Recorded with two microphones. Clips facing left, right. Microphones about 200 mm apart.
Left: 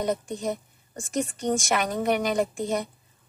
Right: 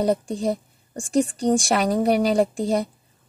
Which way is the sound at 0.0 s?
35° right (ahead or behind).